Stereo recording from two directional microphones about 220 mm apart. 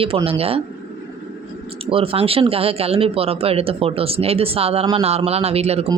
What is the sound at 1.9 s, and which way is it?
Speech, 25° right (ahead or behind).